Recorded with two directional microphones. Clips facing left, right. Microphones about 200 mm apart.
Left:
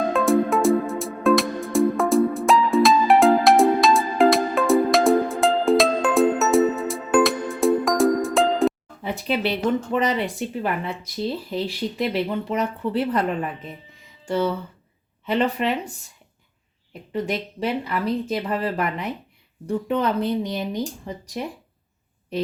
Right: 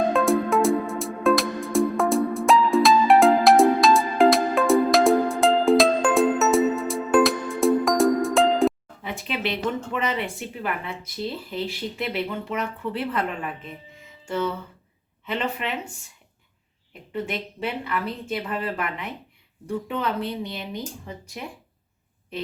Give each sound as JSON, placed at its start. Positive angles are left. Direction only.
{"t": 0.1, "sound": "music", "side_deg": 0}
{"t": 9.5, "sound": "speech", "side_deg": 35}
{"t": 15.3, "sound": "speech", "side_deg": 35}
{"t": 17.1, "sound": "speech", "side_deg": 35}